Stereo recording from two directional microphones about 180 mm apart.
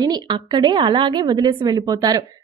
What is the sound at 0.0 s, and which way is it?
A woman's voice, 20° right (ahead or behind).